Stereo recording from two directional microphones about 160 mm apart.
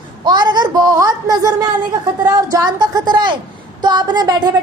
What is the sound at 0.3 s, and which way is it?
A woman's voice, 25° right (ahead or behind).